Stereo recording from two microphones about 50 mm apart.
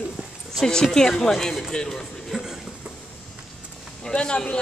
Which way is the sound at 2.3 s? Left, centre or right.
Centre.